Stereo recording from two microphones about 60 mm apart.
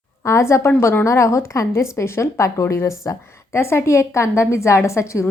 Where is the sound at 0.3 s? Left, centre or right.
Left.